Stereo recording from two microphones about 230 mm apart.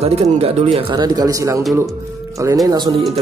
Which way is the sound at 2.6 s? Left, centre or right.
Centre.